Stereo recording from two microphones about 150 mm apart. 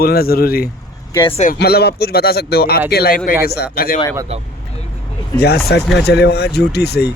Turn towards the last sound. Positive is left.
turn(degrees=90)